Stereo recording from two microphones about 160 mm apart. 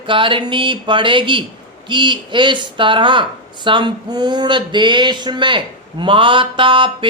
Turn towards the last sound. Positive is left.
turn(degrees=-30)  # may be behind; listen again after turning